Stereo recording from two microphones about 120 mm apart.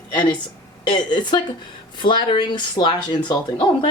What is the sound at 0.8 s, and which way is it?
Speech, 40° left (ahead or behind).